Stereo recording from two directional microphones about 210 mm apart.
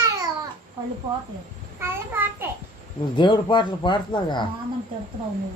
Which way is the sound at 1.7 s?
10° right (ahead or behind).